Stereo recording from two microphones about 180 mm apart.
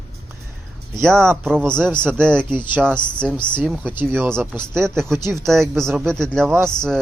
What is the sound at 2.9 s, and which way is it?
Speech, 5° left (ahead or behind).